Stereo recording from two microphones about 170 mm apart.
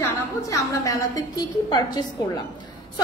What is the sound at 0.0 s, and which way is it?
A woman's voice, 20° left (ahead or behind).